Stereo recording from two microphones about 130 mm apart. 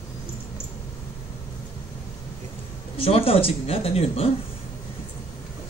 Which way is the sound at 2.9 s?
50° left (ahead or behind).